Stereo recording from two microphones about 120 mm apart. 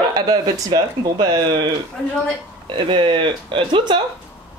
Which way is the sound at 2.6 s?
45° right (ahead or behind).